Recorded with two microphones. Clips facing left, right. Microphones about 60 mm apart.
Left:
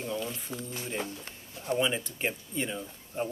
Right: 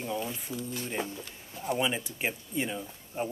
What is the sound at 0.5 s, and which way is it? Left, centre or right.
Speech, left.